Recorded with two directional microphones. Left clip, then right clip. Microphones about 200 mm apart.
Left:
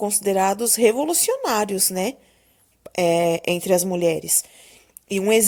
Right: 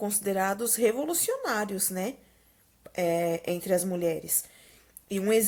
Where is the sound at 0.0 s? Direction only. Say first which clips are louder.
Left 8 dB; 25° left (ahead or behind).